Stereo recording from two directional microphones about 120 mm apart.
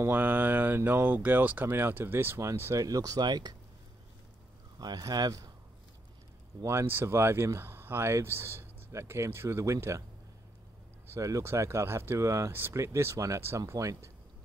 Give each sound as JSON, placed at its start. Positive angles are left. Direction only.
{"t": 0.0, "sound": "speech", "side_deg": -15}
{"t": 4.7, "sound": "speech", "side_deg": -35}
{"t": 6.6, "sound": "speech", "side_deg": -25}
{"t": 11.1, "sound": "speech", "side_deg": -25}